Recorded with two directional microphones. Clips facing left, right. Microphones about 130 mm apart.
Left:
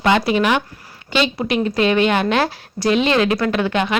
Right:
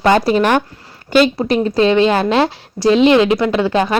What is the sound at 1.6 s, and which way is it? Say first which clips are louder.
Speech: right 4 dB; 30° right (ahead or behind).